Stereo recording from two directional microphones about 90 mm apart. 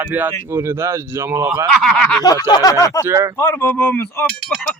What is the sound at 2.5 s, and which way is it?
Speech, 45° left (ahead or behind).